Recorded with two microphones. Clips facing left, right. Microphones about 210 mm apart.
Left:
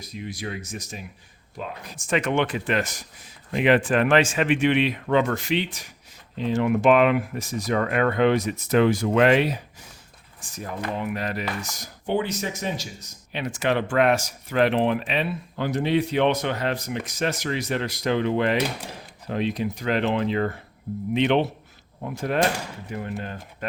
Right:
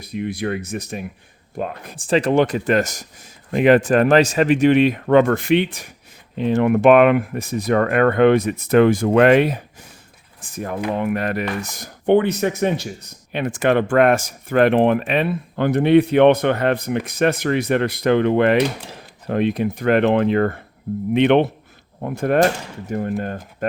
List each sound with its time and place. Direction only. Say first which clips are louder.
0.0 s speech: right 9 dB; 60° right (ahead or behind)
2.0 s speech: right 7 dB; 30° right (ahead or behind); by 23.6 s 50° right (ahead or behind)